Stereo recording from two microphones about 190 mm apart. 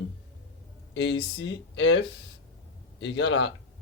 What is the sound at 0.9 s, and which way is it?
Speech, 70° left (ahead or behind).